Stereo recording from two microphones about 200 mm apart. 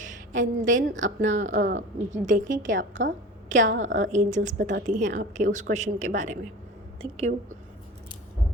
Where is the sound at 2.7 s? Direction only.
65° right (ahead or behind).